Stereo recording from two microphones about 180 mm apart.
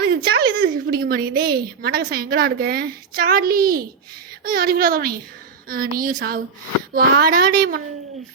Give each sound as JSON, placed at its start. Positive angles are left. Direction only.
{"t": 0.3, "sound": "a woman's voice", "side_deg": -55}